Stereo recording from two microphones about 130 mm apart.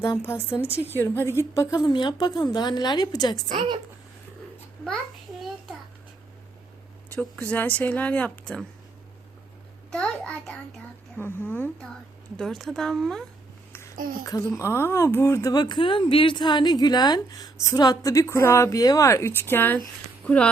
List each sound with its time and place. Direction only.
0.2 s speech: 20° left (ahead or behind)
0.7 s a woman's voice: 15° right (ahead or behind)
0.9 s a woman's voice: 20° left (ahead or behind)
7.1 s speech: 10° left (ahead or behind)
9.9 s a sound: 10° left (ahead or behind)
11.2 s speech: 15° left (ahead or behind)
13.9 s speech: 90° right
14.3 s speech: 25° left (ahead or behind); by 20.5 s 10° left (ahead or behind)